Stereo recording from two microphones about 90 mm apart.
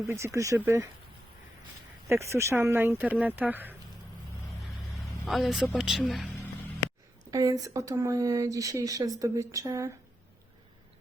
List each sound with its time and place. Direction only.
0.1 s speech: 30° right (ahead or behind)
2.0 s speech: 30° right (ahead or behind)
5.2 s speech: centre (ahead or behind)
7.3 s speech: 40° right (ahead or behind)